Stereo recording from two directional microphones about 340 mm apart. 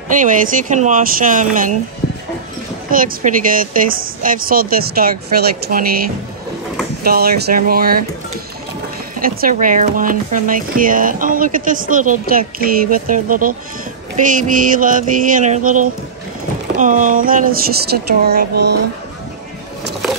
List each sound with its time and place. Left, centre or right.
0.1 s speech: right
2.9 s speech: right
7.0 s speech: right
9.2 s speech: right